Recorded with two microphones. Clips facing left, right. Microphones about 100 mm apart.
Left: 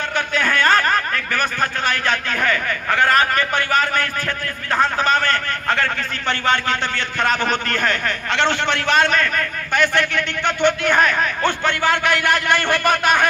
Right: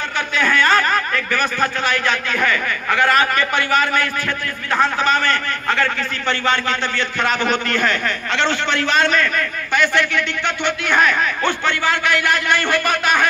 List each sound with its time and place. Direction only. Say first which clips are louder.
0.3 s a man's voice: right 1 dB; 45° left (ahead or behind)